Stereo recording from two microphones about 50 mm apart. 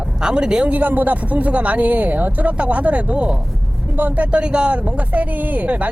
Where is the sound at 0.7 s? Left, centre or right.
Right.